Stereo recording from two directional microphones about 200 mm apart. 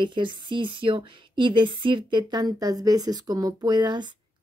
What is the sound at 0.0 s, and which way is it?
Speech, 25° right (ahead or behind).